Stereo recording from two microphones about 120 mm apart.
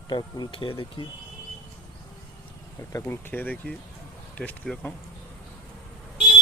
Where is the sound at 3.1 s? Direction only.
15° left (ahead or behind).